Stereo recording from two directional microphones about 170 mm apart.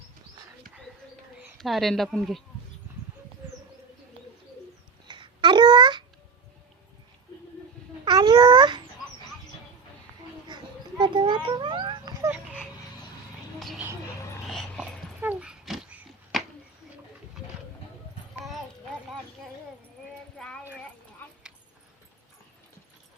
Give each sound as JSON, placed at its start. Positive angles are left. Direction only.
{"t": 1.4, "sound": "a woman's voice", "side_deg": 0}
{"t": 5.0, "sound": "babbling", "side_deg": -25}
{"t": 8.0, "sound": "babbling", "side_deg": -25}
{"t": 10.5, "sound": "cat", "side_deg": -25}
{"t": 12.2, "sound": "a sound", "side_deg": -10}
{"t": 13.6, "sound": "a sound", "side_deg": 0}
{"t": 14.4, "sound": "dog", "side_deg": 5}
{"t": 15.2, "sound": "dog", "side_deg": -10}
{"t": 20.4, "sound": "clip-clop", "side_deg": 5}